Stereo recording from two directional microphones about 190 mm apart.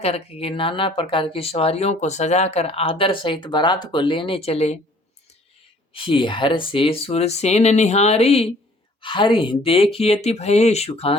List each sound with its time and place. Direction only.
0.0 s speech: 30° left (ahead or behind)
5.9 s speech: 30° left (ahead or behind)